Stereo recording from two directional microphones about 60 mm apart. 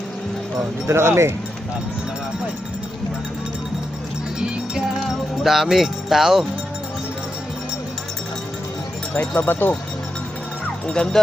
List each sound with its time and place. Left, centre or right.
0.9 s speech: right
4.4 s music: centre
9.3 s speech: left
10.8 s speech: centre